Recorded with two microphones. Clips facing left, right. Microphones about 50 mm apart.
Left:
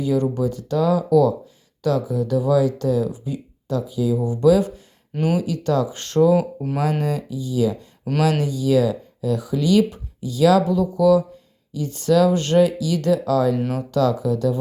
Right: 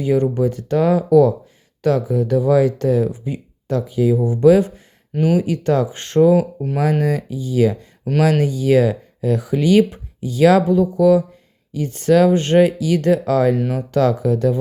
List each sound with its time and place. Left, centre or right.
0.0 s speech: right
5.1 s speech: centre
5.4 s speech: right
6.3 s speech: centre
7.0 s speech: right
8.2 s speech: right